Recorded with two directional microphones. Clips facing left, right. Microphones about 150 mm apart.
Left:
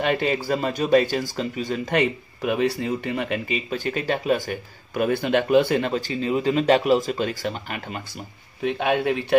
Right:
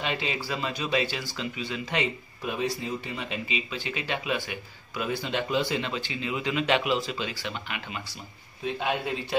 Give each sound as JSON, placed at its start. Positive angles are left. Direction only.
{"t": 0.0, "sound": "speech", "side_deg": 55}
{"t": 8.6, "sound": "speech", "side_deg": 65}